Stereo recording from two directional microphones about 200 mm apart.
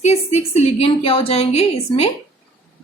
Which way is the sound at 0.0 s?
30° left (ahead or behind).